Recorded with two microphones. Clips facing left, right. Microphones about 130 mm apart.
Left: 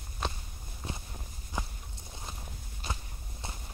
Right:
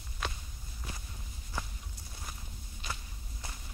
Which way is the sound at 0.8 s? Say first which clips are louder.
Left 5 dB; 25° left (ahead or behind).